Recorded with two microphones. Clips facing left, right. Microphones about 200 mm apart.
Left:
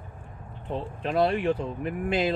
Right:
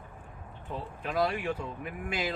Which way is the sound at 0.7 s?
30° left (ahead or behind).